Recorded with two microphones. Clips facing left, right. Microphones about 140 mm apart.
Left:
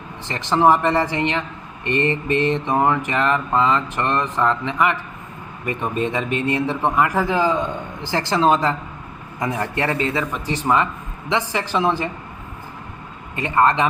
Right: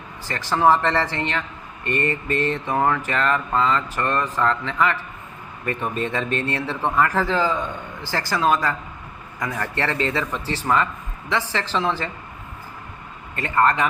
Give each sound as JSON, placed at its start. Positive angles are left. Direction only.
{"t": 0.3, "sound": "a man's voice", "side_deg": 20}
{"t": 13.3, "sound": "a man's voice", "side_deg": 15}